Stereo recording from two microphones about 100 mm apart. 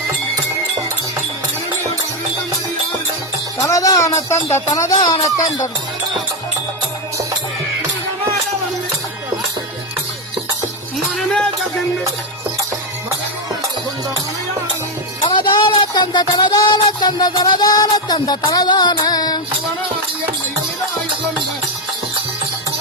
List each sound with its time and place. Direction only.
3.6 s speech: 35° left (ahead or behind)
11.2 s music: 5° left (ahead or behind)
15.2 s music: 50° left (ahead or behind)